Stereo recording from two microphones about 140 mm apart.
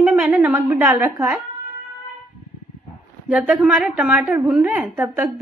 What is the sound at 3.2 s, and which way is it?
A woman's voice, 5° right (ahead or behind).